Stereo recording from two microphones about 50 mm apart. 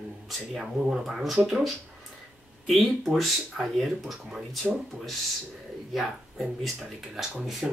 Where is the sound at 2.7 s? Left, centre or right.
Centre.